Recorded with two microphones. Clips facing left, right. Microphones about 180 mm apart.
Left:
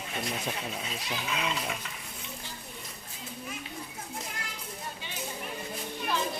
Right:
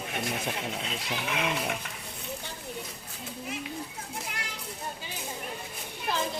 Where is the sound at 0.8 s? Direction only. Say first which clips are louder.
Right 2 dB; 70° right (ahead or behind).